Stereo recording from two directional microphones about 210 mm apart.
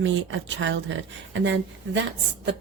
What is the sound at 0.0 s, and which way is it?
Speech, 60° right (ahead or behind).